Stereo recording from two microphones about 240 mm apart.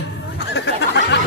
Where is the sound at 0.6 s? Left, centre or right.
Left.